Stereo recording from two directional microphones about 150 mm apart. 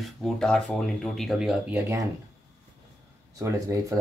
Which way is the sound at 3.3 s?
20° right (ahead or behind).